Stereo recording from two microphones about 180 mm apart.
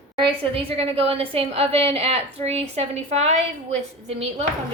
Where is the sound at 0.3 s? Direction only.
30° right (ahead or behind).